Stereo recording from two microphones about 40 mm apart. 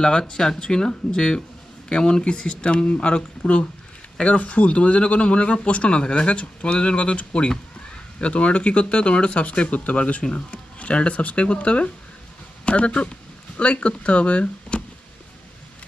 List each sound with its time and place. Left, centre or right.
0.3 s speech: centre; by 14.4 s left
14.7 s music: left